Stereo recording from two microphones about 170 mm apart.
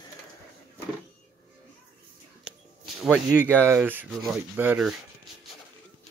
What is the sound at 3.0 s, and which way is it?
Speech, centre (ahead or behind).